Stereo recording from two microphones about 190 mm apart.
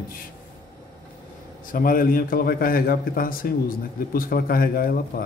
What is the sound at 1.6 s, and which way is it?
A man's voice, 45° left (ahead or behind).